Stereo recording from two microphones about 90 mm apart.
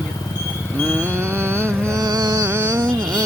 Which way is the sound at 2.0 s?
45° right (ahead or behind).